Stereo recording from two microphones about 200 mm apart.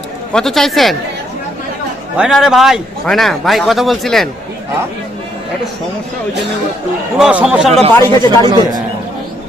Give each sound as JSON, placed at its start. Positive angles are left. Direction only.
{"t": 0.3, "sound": "a man's voice", "side_deg": 0}
{"t": 2.1, "sound": "a man's voice", "side_deg": -5}
{"t": 7.2, "sound": "a man's voice", "side_deg": -5}
{"t": 7.9, "sound": "speech", "side_deg": 15}
{"t": 8.4, "sound": "a man's voice", "side_deg": -20}